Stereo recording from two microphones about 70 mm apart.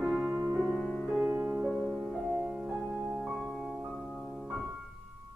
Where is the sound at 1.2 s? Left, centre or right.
Right.